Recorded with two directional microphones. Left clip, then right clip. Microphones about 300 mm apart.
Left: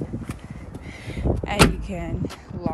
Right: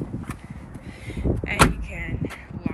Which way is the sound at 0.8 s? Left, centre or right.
Left.